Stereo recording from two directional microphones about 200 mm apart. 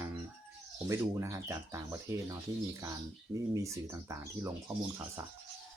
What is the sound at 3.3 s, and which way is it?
Speech, 15° right (ahead or behind).